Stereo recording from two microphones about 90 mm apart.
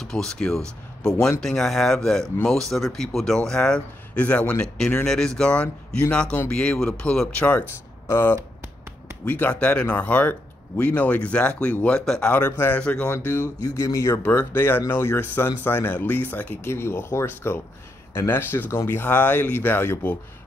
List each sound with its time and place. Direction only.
0.0 s speech: 5° left (ahead or behind)
8.1 s speech: 25° left (ahead or behind)
12.0 s speech: 5° left (ahead or behind)
12.3 s speech: 20° left (ahead or behind)
13.6 s speech: 40° left (ahead or behind)
14.2 s speech: 20° left (ahead or behind)